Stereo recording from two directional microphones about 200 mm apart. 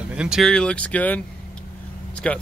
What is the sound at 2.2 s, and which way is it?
Speech, 5° left (ahead or behind).